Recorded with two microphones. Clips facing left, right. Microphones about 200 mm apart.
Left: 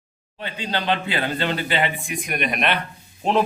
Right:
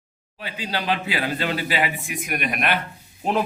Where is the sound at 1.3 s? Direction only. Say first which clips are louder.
Left 1 dB; 30° left (ahead or behind).